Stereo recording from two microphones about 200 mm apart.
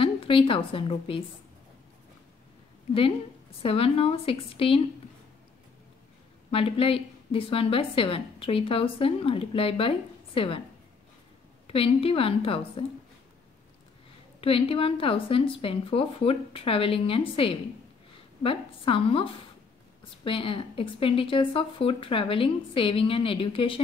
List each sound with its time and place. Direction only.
0.0 s a woman's voice: 25° left (ahead or behind)
3.6 s a woman's voice: 30° left (ahead or behind)
6.5 s a woman's voice: 30° left (ahead or behind)
11.6 s a woman's voice: 30° left (ahead or behind)
14.4 s a woman's voice: 30° left (ahead or behind)
20.2 s a woman's voice: 25° left (ahead or behind)